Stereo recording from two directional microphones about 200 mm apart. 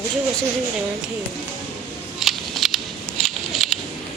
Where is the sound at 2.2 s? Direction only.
Centre (ahead or behind).